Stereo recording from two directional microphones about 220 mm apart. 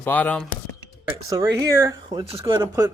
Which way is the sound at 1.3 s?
15° right (ahead or behind).